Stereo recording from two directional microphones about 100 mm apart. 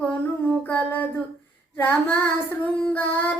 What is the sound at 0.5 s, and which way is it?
Music, 15° left (ahead or behind).